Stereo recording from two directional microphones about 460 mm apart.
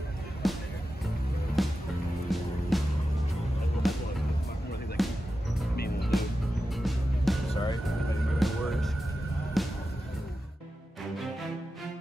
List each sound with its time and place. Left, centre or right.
0.4 s music: centre
3.8 s music: centre